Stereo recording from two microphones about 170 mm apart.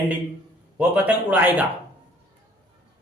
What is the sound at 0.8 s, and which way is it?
Speech, 10° right (ahead or behind).